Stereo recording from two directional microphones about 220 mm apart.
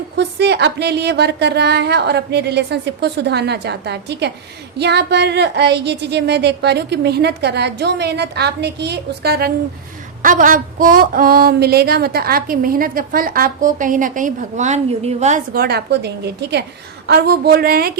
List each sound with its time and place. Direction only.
0.2 s a woman's voice: 50° right (ahead or behind)
10.2 s a sound: 35° right (ahead or behind)
15.5 s a woman's voice: 45° right (ahead or behind)